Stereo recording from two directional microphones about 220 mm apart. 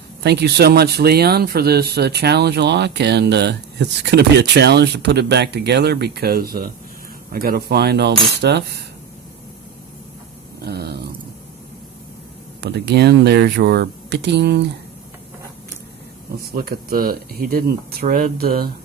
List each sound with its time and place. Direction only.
0.2 s speech: 50° right (ahead or behind)
10.7 s a sound: 45° right (ahead or behind)
12.6 s speech: 50° right (ahead or behind)
16.5 s speech: 45° right (ahead or behind)